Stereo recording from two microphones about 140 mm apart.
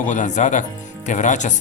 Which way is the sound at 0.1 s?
60° left (ahead or behind).